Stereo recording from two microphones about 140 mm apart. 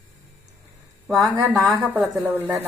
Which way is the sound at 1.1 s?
20° right (ahead or behind).